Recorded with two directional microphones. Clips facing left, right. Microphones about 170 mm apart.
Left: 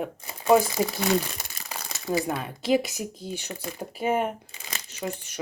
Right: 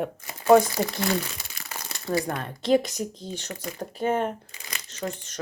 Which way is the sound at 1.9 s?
10° left (ahead or behind).